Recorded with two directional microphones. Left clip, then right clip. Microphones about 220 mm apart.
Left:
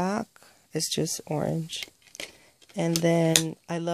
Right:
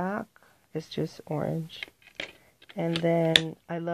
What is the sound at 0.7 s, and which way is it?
Speech, 35° left (ahead or behind).